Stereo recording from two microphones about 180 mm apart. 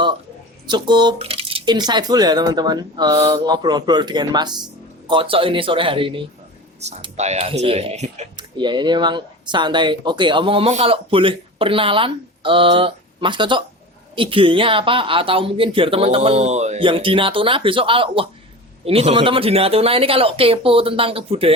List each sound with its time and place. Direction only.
0.7 s speech: 25° right (ahead or behind)
8.4 s speech: 25° right (ahead or behind)